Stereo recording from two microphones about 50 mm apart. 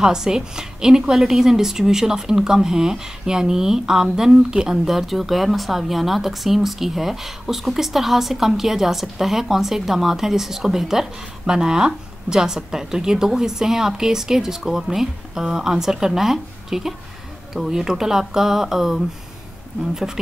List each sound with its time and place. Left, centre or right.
0.0 s a woman's voice: centre